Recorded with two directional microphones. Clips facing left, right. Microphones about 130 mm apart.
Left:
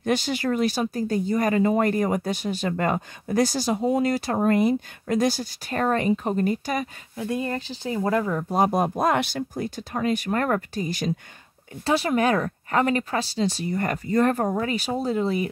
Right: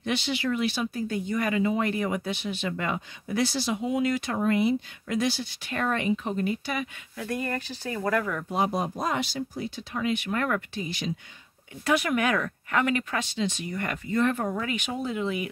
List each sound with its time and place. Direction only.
0.0 s speech: 45° left (ahead or behind)
7.2 s speech: 20° left (ahead or behind)
8.5 s speech: 50° left (ahead or behind)
11.8 s speech: 30° left (ahead or behind)